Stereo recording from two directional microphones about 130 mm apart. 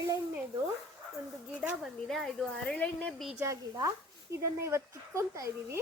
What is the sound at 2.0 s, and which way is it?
Speech, centre (ahead or behind).